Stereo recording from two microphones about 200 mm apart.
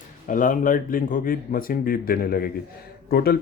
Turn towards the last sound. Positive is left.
turn(degrees=50)  # may be behind; listen again after turning